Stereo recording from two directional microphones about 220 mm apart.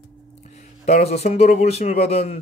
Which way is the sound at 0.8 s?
30° left (ahead or behind).